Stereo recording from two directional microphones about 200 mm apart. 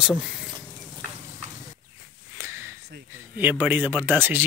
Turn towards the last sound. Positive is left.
turn(degrees=-10)  # may be behind; listen again after turning